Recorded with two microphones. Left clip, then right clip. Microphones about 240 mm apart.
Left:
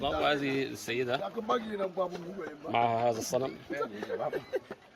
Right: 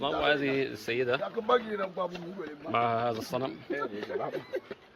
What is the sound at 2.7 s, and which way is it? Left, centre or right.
Speech, centre.